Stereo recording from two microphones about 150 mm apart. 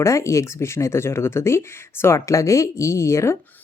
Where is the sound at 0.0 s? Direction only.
20° left (ahead or behind).